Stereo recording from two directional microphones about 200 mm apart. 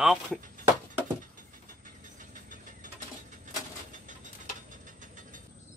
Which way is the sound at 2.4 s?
40° right (ahead or behind).